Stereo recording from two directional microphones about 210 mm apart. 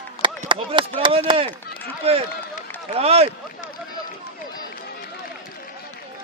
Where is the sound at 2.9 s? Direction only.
30° right (ahead or behind).